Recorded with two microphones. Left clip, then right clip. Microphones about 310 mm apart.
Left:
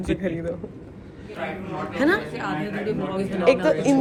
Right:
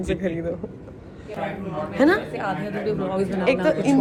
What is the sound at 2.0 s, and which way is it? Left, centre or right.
Speech, centre.